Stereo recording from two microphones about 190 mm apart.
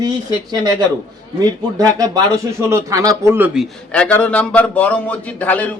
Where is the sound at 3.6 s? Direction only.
5° left (ahead or behind).